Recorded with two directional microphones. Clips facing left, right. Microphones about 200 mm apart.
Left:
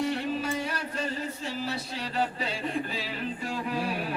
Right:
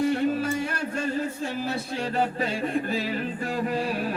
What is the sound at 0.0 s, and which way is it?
Music, 50° right (ahead or behind).